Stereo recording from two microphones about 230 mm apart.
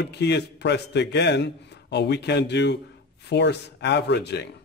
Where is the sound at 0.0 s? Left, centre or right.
Left.